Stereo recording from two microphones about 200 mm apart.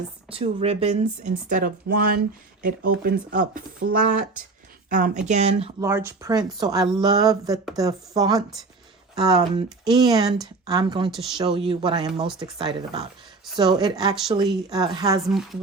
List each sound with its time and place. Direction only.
0.3 s speech: 30° right (ahead or behind)
5.8 s speech: 15° right (ahead or behind)